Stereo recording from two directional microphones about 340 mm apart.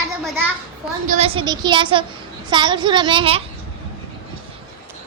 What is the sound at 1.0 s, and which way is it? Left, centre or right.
A woman's voice, centre.